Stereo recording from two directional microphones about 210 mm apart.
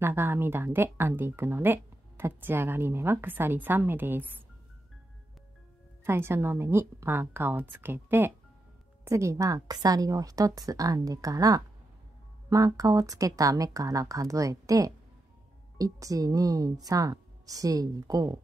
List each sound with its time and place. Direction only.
0.0 s speech: 10° right (ahead or behind)
6.0 s speech: 10° right (ahead or behind)